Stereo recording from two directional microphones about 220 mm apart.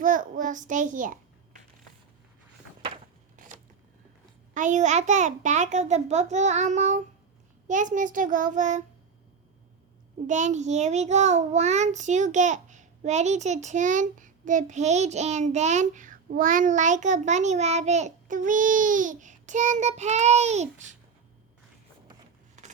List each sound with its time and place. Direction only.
0.0 s a child's voice: 35° right (ahead or behind)
4.5 s a child's voice: 35° right (ahead or behind)
10.2 s a child's voice: 35° right (ahead or behind)
22.6 s a sound: 30° right (ahead or behind)